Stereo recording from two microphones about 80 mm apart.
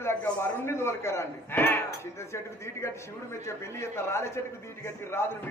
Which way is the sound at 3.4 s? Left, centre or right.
Left.